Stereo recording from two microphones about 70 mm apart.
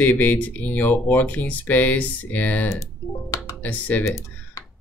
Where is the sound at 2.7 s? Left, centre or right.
Left.